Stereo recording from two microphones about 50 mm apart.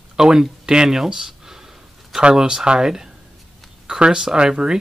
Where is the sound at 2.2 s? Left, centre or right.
Centre.